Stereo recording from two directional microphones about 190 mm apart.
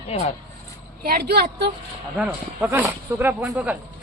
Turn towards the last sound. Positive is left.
turn(degrees=-10)  # may be behind; listen again after turning